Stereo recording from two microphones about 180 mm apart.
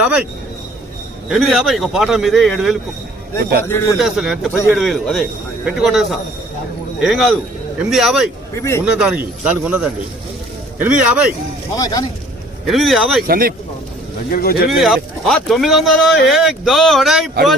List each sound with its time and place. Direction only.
1.3 s speech: centre (ahead or behind)
3.6 s speech: 15° left (ahead or behind)
3.9 s speech: centre (ahead or behind)
8.5 s speech: 15° left (ahead or behind)
8.8 s speech: 5° right (ahead or behind)
11.8 s speech: 20° left (ahead or behind)
12.6 s speech: centre (ahead or behind)
13.2 s speech: 55° right (ahead or behind)
14.3 s speech: 55° left (ahead or behind)
14.7 s speech: centre (ahead or behind)